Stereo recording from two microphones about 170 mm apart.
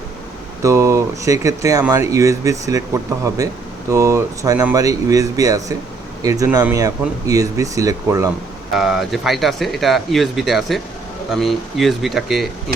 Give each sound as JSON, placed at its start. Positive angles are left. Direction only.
{"t": 0.6, "sound": "speech", "side_deg": -15}
{"t": 8.7, "sound": "speech", "side_deg": 0}